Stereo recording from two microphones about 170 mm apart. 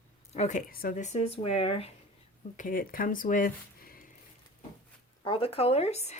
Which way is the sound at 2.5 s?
55° left (ahead or behind).